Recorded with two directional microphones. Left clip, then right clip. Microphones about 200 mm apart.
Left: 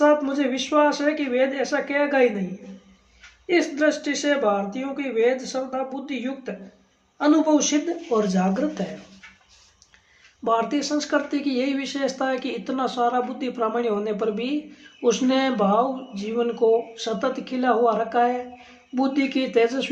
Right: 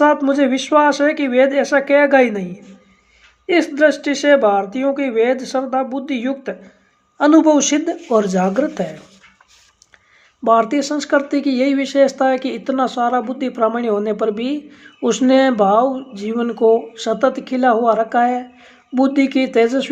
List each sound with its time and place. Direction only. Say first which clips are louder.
0.0 s speech: right 6 dB; 45° right (ahead or behind)
3.4 s speech: right 7 dB; 45° right (ahead or behind)
10.4 s speech: right 8 dB; 35° right (ahead or behind)